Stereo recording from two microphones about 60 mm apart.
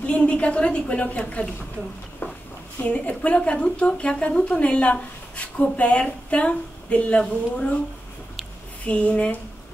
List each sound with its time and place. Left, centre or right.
0.0 s speech: centre
2.8 s speech: left
8.8 s speech: left